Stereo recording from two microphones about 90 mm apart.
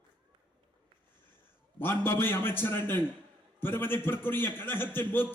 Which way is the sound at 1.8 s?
25° left (ahead or behind).